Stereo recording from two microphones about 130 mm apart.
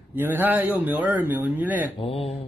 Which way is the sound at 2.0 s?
50° left (ahead or behind).